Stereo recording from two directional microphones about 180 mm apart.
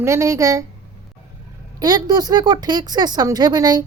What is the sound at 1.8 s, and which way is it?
A woman's voice, 20° right (ahead or behind).